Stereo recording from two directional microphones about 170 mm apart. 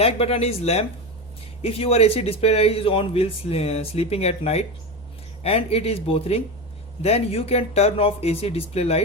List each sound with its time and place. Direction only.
0.0 s speech: 35° left (ahead or behind)